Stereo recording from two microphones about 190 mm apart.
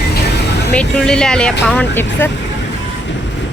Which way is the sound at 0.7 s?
5° left (ahead or behind).